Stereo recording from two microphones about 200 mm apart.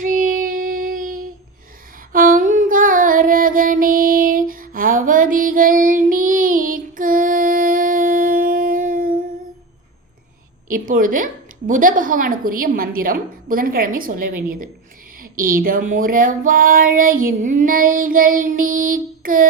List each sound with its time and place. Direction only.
0.0 s child singing: 40° right (ahead or behind)
2.1 s female singing: 45° right (ahead or behind)
10.7 s a sound: 45° right (ahead or behind)